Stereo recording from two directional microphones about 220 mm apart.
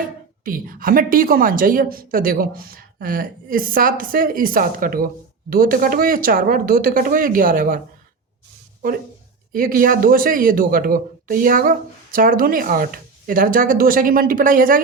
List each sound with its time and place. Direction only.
0.4 s a man's voice: 40° right (ahead or behind)
9.5 s a man's voice: 40° right (ahead or behind)